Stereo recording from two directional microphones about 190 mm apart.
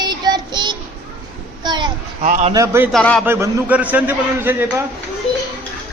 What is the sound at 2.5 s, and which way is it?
Speech, 15° right (ahead or behind).